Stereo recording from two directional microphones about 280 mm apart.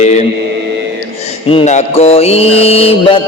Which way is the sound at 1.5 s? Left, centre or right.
Left.